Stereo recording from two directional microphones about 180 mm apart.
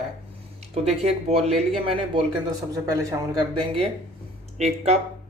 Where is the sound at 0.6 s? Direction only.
35° right (ahead or behind).